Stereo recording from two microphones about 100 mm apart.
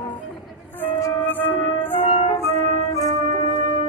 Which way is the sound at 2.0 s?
60° left (ahead or behind).